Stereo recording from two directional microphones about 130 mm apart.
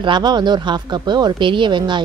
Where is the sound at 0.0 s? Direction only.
35° right (ahead or behind).